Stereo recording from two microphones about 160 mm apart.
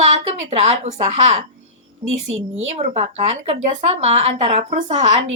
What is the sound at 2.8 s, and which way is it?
A woman's voice, 45° right (ahead or behind).